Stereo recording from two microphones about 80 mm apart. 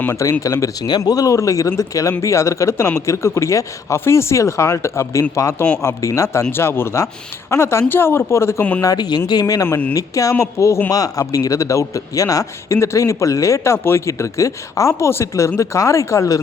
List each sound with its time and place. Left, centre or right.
0.2 s a man's voice: left
0.9 s a man's voice: left
8.8 s speech: left
9.6 s speech: left
9.9 s a man's voice: left
13.7 s speech: left
14.1 s speech: left